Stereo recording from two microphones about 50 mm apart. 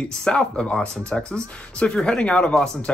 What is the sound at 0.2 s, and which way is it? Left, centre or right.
Speech, centre.